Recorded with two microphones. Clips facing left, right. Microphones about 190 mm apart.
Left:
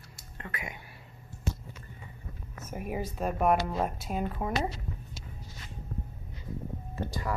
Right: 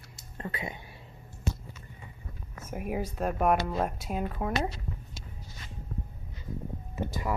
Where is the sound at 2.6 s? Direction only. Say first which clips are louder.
Right 2 dB; 5° right (ahead or behind).